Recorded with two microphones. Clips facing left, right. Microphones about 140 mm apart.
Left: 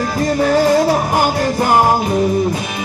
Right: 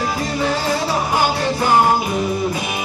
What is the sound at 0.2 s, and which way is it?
Music, 45° left (ahead or behind).